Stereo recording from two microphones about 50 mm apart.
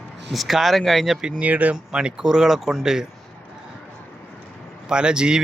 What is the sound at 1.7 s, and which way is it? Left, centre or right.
Speech, centre.